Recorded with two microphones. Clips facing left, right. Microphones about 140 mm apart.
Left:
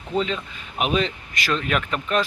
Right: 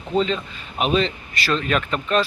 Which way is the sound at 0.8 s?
10° left (ahead or behind).